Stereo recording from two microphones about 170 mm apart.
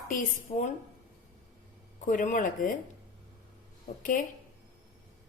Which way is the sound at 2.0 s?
50° left (ahead or behind).